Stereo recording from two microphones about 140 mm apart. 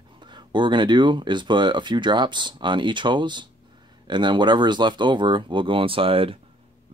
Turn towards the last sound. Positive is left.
turn(degrees=-40)  # may be behind; listen again after turning